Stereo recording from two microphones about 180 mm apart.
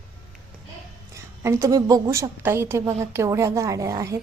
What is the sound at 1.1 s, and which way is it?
A woman's voice, 15° right (ahead or behind).